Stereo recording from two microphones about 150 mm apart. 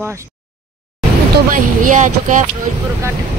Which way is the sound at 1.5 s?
60° right (ahead or behind).